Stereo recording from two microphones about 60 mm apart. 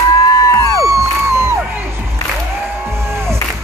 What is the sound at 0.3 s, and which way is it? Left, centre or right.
Music, left.